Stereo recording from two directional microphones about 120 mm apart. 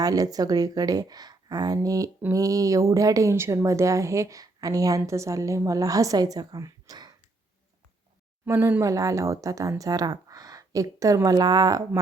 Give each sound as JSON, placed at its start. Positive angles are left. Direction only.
{"t": 0.0, "sound": "a woman's voice", "side_deg": -30}
{"t": 8.4, "sound": "a woman's voice", "side_deg": -20}